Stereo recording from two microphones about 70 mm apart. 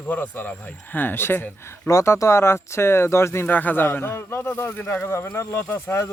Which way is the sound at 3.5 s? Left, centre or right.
Left.